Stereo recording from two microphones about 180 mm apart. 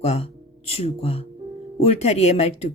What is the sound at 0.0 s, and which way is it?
Speech, 35° left (ahead or behind).